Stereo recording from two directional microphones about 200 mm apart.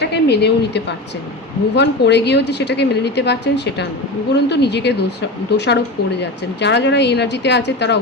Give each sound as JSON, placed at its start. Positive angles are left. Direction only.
{"t": 0.0, "sound": "a woman's voice", "side_deg": 55}